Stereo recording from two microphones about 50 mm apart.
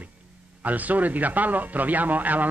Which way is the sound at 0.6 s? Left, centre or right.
Right.